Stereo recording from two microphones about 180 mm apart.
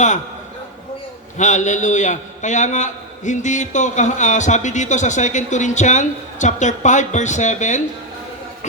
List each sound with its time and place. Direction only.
1.4 s a man's voice: 40° left (ahead or behind)